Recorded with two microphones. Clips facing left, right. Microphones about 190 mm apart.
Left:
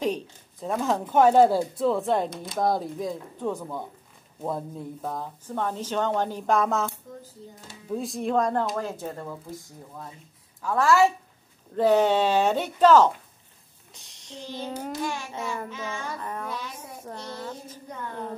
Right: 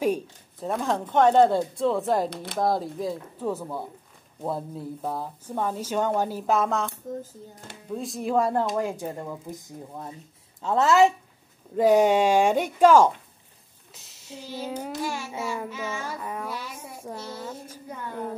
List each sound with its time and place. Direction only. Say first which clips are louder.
0.0 s speech: right 3 dB; 5° right (ahead or behind)
2.2 s speech: right 1 dB; 65° right (ahead or behind)
2.6 s speech: even; centre (ahead or behind)
4.4 s child singing: even; 5° right (ahead or behind)
7.9 s child singing: even; centre (ahead or behind); by 9.6 s 15° right (ahead or behind)
10.6 s a woman's voice: right 1 dB; 25° right (ahead or behind)
11.7 s child singing: right 2 dB; 10° right (ahead or behind)